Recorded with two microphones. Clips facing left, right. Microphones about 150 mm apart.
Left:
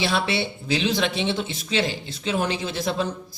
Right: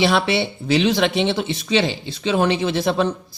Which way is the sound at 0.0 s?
70° right (ahead or behind).